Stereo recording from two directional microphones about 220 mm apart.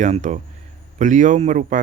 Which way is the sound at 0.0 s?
35° right (ahead or behind).